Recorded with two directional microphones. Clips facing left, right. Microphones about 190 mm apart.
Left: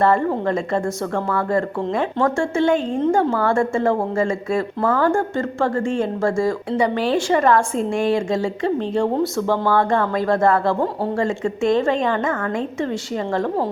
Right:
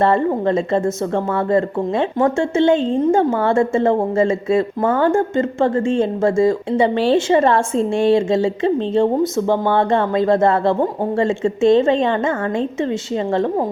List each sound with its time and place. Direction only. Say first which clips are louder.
0.0 s speech: right 2 dB; 20° right (ahead or behind)